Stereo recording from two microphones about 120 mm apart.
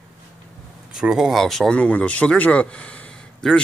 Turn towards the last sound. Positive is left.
turn(degrees=5)  # may be behind; listen again after turning